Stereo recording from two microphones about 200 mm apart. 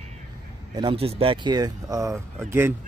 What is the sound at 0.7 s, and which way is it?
A man's voice, 25° right (ahead or behind).